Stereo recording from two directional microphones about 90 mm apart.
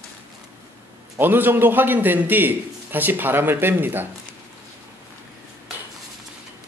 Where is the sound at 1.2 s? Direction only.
20° right (ahead or behind).